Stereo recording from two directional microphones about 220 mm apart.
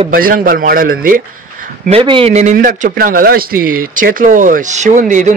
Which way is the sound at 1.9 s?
25° right (ahead or behind).